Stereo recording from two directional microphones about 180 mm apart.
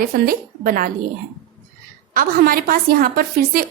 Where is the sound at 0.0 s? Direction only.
50° right (ahead or behind).